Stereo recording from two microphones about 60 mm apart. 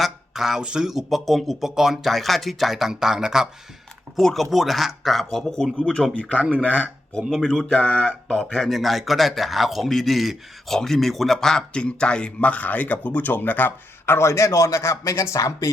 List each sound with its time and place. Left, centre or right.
0.0 s speech: centre
4.2 s speech: centre
4.5 s speech: centre
6.3 s speech: right
7.1 s speech: centre
8.5 s a man's voice: centre; by 14.2 s left
14.2 s speech: left